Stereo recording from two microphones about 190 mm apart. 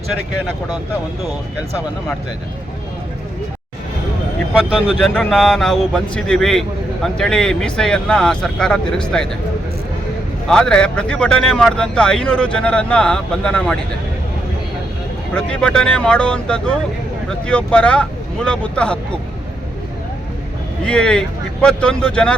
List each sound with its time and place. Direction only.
4.5 s speech: 5° right (ahead or behind)
10.5 s speech: 5° left (ahead or behind)
15.3 s speech: 5° left (ahead or behind)
20.8 s speech: 5° left (ahead or behind)